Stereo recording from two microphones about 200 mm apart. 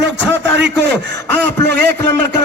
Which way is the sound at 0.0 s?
60° right (ahead or behind).